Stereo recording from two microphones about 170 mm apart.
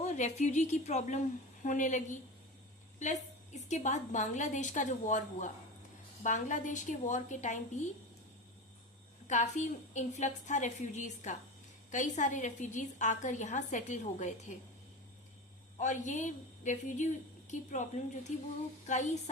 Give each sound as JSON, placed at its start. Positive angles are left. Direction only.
{"t": 0.0, "sound": "a woman's voice", "side_deg": 45}
{"t": 9.2, "sound": "a woman's voice", "side_deg": 45}
{"t": 15.8, "sound": "a woman's voice", "side_deg": 45}